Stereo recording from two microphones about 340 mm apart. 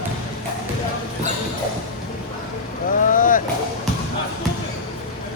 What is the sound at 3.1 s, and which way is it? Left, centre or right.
Vehicle, left.